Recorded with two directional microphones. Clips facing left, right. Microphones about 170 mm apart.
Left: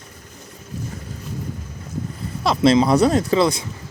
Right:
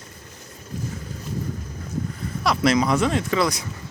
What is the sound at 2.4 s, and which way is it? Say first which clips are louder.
Speech: left 4 dB; 25° left (ahead or behind).